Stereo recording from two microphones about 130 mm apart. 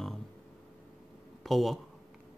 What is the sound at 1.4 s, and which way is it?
Speech, centre (ahead or behind).